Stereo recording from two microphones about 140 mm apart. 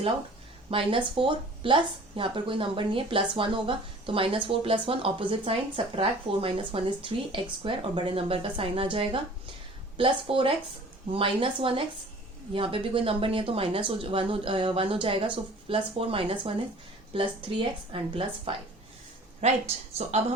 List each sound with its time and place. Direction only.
0.7 s speech: 40° right (ahead or behind)
19.4 s speech: 50° right (ahead or behind)